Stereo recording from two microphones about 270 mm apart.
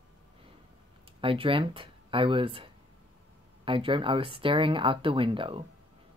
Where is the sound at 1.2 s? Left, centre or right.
Centre.